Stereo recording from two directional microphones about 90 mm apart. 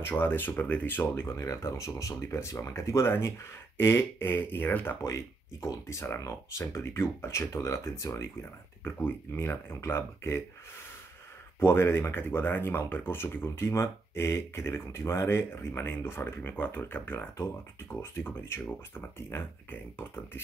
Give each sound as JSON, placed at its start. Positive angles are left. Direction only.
{"t": 0.0, "sound": "speech", "side_deg": 25}
{"t": 1.3, "sound": "speech", "side_deg": 35}
{"t": 5.0, "sound": "speech", "side_deg": 35}
{"t": 11.6, "sound": "speech", "side_deg": 25}